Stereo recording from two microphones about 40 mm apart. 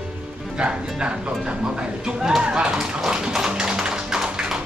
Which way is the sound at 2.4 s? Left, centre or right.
Right.